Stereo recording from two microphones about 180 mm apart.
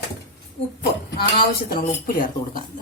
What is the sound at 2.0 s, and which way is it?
Speech, 50° left (ahead or behind).